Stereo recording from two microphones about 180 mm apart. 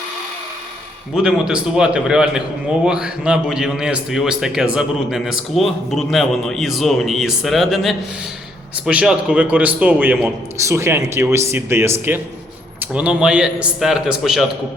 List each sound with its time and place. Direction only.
1.1 s a man's voice: 5° right (ahead or behind)
10.6 s a man's voice: 15° right (ahead or behind)